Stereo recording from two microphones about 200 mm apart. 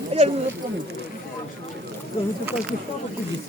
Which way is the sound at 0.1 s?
30° right (ahead or behind).